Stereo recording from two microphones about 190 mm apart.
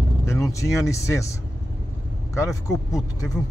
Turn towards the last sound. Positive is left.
turn(degrees=20)  # may be behind; listen again after turning